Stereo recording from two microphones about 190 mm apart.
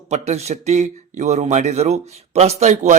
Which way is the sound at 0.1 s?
35° right (ahead or behind).